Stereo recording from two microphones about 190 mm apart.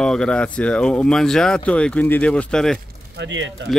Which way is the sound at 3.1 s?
75° right (ahead or behind).